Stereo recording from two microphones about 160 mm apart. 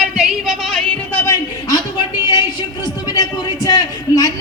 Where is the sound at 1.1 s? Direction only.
20° left (ahead or behind).